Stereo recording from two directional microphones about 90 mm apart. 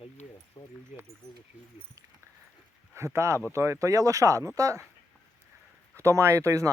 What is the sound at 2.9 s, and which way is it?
Speech, 30° right (ahead or behind).